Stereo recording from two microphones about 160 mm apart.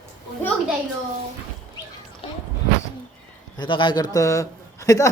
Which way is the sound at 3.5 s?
30° left (ahead or behind).